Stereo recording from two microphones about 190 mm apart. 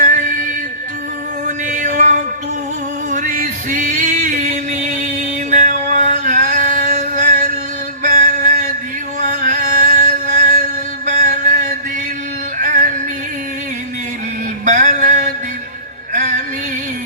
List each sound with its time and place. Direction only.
0.0 s music: 45° right (ahead or behind)
1.5 s a sound: 40° right (ahead or behind)
3.1 s music: 45° right (ahead or behind)
5.5 s male singing: 40° right (ahead or behind)
8.0 s music: 40° right (ahead or behind)
11.0 s chant: 40° right (ahead or behind)
14.6 s a sound: 40° right (ahead or behind)